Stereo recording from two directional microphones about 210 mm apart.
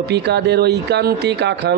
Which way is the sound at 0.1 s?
55° right (ahead or behind).